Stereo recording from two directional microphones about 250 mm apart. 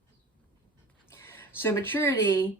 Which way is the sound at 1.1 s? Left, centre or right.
Centre.